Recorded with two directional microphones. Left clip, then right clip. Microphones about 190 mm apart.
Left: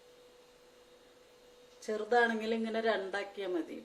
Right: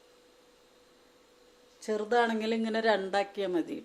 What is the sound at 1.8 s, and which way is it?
A woman's voice, 50° right (ahead or behind).